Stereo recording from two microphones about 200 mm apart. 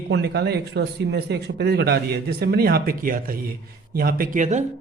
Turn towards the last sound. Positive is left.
turn(degrees=-40)  # may be behind; listen again after turning